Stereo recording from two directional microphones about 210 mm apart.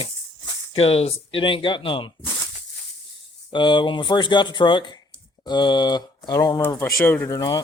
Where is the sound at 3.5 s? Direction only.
20° left (ahead or behind).